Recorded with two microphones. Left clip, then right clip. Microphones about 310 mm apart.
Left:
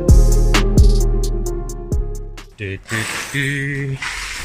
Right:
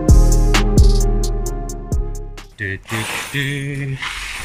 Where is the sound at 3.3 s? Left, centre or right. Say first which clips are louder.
Left 2 dB; centre.